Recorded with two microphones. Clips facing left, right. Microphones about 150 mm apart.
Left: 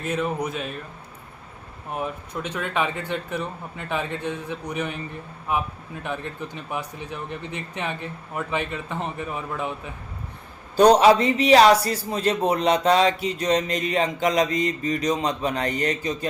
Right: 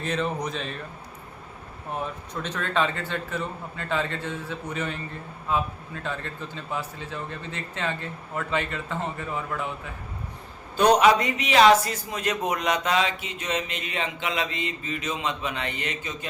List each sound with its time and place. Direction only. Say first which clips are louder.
0.0 s a man's voice: left 2 dB; 10° left (ahead or behind)
2.3 s a man's voice: right 1 dB; 10° left (ahead or behind)
10.8 s a man's voice: left 4 dB; 35° left (ahead or behind)